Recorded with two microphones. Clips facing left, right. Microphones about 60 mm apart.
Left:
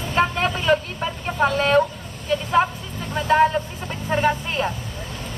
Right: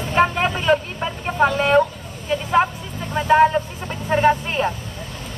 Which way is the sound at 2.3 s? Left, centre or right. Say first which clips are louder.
Even; centre.